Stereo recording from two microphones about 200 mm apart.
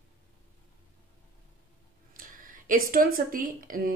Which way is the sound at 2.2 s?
45° right (ahead or behind).